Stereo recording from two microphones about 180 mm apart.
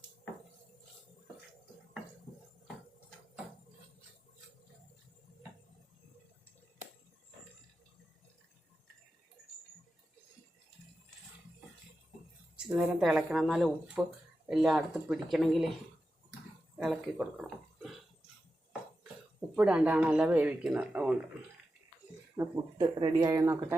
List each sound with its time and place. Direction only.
12.5 s speech: 5° right (ahead or behind)
16.7 s speech: 5° right (ahead or behind)
19.5 s speech: 5° right (ahead or behind)
22.4 s speech: 20° right (ahead or behind)